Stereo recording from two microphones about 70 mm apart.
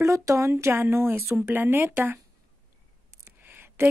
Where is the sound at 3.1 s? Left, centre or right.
Right.